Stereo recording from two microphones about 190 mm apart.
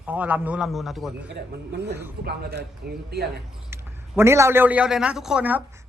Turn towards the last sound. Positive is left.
turn(degrees=-5)  # may be behind; listen again after turning